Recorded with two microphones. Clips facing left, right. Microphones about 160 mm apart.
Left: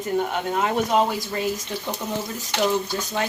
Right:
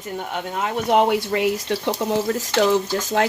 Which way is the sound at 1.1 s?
70° right (ahead or behind).